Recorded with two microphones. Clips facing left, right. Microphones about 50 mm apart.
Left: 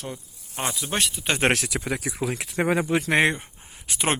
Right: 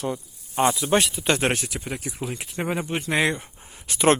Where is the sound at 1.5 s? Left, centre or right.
Left.